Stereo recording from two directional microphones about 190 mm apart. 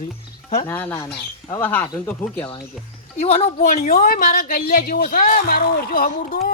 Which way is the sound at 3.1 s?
30° left (ahead or behind).